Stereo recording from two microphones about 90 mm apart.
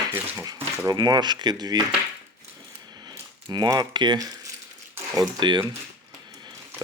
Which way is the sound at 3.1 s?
50° right (ahead or behind).